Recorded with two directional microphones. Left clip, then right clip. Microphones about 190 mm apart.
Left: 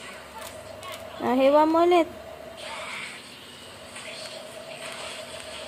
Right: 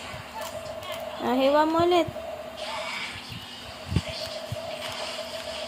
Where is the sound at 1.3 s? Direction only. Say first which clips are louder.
Left 2 dB; 15° left (ahead or behind).